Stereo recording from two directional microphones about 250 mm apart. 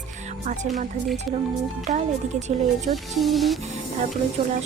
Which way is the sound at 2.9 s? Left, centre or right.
Centre.